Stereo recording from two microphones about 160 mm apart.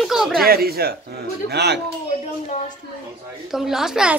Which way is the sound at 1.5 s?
90° right.